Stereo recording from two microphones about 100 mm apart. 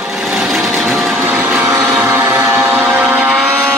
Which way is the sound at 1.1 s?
15° right (ahead or behind).